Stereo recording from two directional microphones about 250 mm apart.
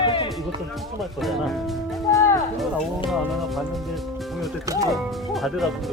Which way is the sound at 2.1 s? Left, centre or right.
Centre.